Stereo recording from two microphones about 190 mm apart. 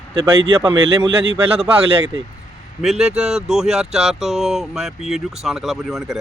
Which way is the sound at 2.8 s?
5° right (ahead or behind).